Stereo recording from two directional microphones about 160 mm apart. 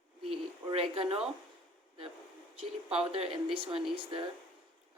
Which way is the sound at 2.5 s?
40° right (ahead or behind).